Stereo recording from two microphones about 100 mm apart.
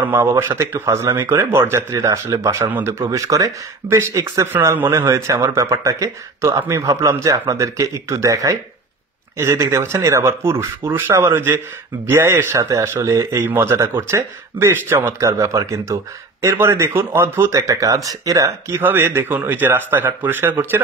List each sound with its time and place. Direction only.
0.1 s speech: 25° right (ahead or behind)
18.8 s speech: 20° right (ahead or behind)